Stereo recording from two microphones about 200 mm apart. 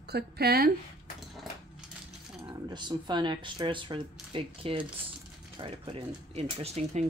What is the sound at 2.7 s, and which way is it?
Speech, 20° right (ahead or behind).